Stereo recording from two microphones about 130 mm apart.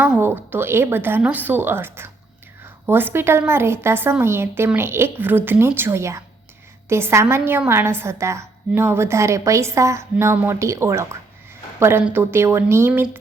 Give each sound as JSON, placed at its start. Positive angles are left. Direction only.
{"t": 0.2, "sound": "a woman's voice", "side_deg": -15}